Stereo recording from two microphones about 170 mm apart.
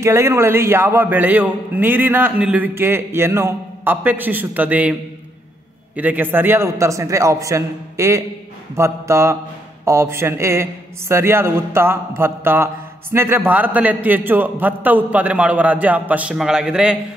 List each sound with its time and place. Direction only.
0.0 s a man's voice: 15° right (ahead or behind)
5.9 s a man's voice: 10° right (ahead or behind)